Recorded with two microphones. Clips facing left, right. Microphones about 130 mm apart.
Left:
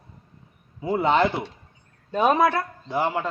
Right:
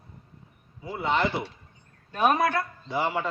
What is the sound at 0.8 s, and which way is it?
Speech, 65° left (ahead or behind).